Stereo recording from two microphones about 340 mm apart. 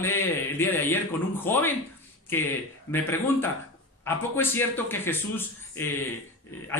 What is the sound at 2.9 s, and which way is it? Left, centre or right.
Speech, centre.